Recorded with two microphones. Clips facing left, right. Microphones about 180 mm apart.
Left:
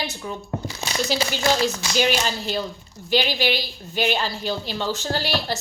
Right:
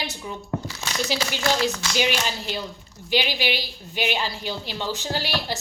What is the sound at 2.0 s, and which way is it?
A woman's voice, 15° right (ahead or behind).